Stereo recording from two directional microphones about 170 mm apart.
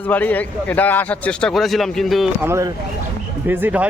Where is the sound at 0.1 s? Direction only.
10° left (ahead or behind).